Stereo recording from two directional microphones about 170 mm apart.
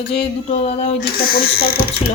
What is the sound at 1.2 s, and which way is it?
Speech, 60° left (ahead or behind).